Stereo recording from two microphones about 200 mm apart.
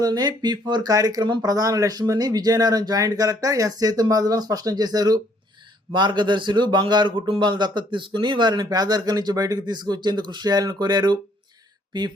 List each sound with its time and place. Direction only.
0.0 s speech: 20° right (ahead or behind)